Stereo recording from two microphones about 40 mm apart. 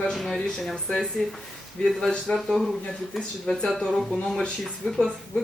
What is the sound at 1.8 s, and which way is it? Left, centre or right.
Speech, centre.